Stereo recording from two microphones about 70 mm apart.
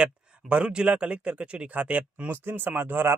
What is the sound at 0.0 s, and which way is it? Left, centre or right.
Speech, centre.